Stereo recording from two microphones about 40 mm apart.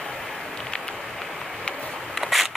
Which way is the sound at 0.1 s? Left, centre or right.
Centre.